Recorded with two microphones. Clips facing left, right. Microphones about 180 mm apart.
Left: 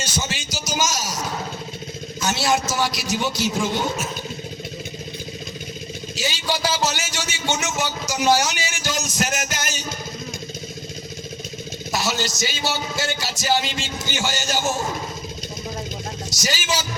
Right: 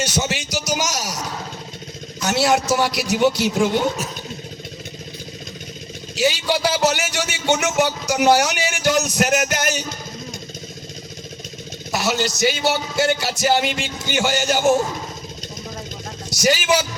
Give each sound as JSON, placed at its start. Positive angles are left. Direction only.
{"t": 0.0, "sound": "a sound", "side_deg": -70}
{"t": 2.2, "sound": "a man's voice", "side_deg": -65}
{"t": 6.1, "sound": "vehicle", "side_deg": -65}
{"t": 6.7, "sound": "a man's voice", "side_deg": -65}
{"t": 11.9, "sound": "a man's voice", "side_deg": -65}
{"t": 16.3, "sound": "a man's voice", "side_deg": -60}